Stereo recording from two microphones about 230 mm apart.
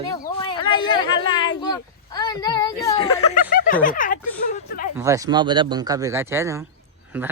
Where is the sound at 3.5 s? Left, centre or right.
Left.